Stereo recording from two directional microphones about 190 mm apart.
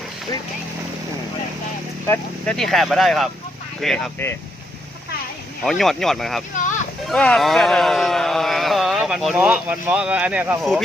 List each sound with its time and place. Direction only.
2.0 s speech: 5° left (ahead or behind)
5.6 s speech: centre (ahead or behind)
6.6 s a sound: 40° left (ahead or behind)
7.1 s speech: 5° left (ahead or behind)
10.6 s speech: centre (ahead or behind)